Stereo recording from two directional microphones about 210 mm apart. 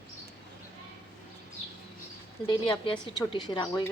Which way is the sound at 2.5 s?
20° left (ahead or behind).